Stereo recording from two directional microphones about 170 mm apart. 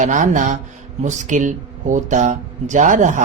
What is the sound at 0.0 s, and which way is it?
Speech, 45° right (ahead or behind).